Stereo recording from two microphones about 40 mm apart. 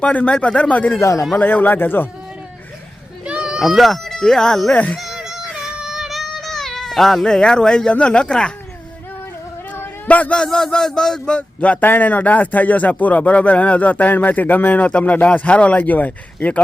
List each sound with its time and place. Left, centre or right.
0.0 s speech: left
1.4 s speech: left
3.2 s a sound: right
3.6 s speech: centre
4.7 s speech: left
4.9 s baby cry: centre
5.5 s child singing: centre; by 8.5 s left
10.1 s speech: left
10.3 s speech: left
11.3 s speech: left
11.8 s speech: left
15.8 s speech: left